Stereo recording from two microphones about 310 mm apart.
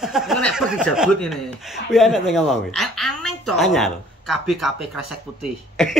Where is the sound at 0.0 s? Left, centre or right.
Centre.